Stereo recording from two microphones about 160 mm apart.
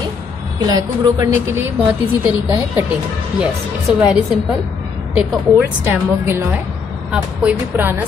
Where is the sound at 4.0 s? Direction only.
5° right (ahead or behind).